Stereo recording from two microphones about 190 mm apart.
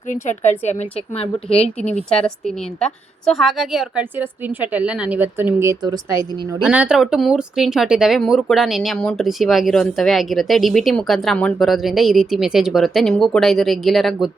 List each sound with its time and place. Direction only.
0.1 s a woman's voice: 40° left (ahead or behind)
1.8 s a woman's voice: 5° left (ahead or behind); by 6.0 s 15° right (ahead or behind)
6.5 s speech: 5° right (ahead or behind)